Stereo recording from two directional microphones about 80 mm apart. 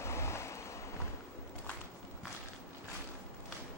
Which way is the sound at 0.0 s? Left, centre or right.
Left.